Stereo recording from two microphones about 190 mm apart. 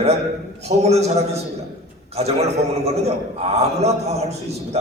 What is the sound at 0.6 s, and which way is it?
Speech, 35° right (ahead or behind).